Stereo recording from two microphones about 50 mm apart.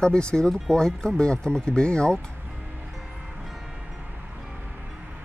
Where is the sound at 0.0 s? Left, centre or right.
Centre.